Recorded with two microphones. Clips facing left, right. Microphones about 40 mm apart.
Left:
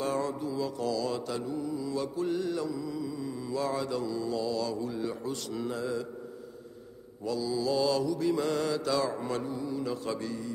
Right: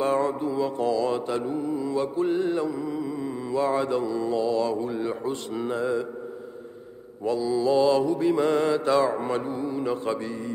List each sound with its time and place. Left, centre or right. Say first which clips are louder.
0.0 s mantra: right 7 dB; right
7.2 s mantra: right 7 dB; right